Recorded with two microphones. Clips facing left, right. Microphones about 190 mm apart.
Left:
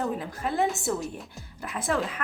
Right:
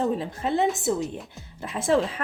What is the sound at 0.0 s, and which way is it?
Speech, 25° right (ahead or behind).